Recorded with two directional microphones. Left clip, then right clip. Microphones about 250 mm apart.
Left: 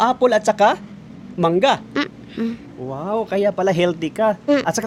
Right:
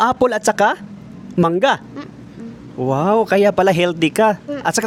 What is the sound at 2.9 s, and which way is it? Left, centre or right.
Speech, right.